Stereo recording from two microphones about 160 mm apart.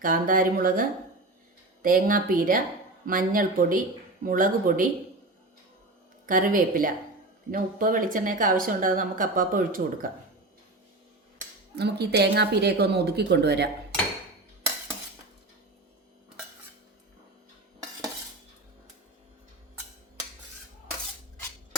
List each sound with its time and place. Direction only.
0.0 s speech: 60° right (ahead or behind)
6.2 s speech: 60° right (ahead or behind)
11.8 s speech: 90° right